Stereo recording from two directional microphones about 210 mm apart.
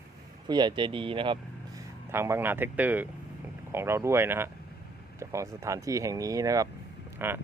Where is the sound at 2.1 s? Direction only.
10° right (ahead or behind).